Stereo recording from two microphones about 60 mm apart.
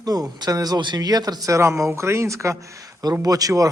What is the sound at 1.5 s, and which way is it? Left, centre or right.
Speech, right.